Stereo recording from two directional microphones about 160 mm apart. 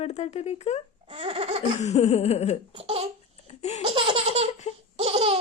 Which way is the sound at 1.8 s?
45° left (ahead or behind).